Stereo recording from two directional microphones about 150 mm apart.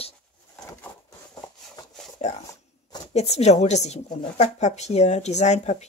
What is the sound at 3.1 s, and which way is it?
Speech, 45° left (ahead or behind).